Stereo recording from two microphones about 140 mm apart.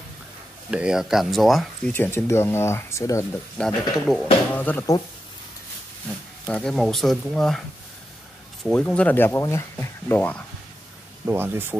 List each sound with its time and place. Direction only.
0.7 s speech: 5° right (ahead or behind)
1.9 s speech: 15° left (ahead or behind)
3.5 s speech: 5° left (ahead or behind)
6.4 s speech: 5° left (ahead or behind)
8.6 s speech: 10° left (ahead or behind)
11.2 s speech: 15° right (ahead or behind)